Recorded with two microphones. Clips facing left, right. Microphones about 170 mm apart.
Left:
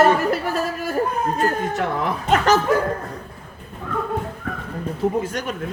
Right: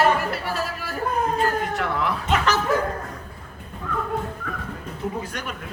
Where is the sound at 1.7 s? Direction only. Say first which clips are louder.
Left 2 dB; 45° left (ahead or behind).